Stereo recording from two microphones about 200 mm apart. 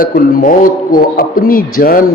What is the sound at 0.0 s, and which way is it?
A man's voice, 45° left (ahead or behind).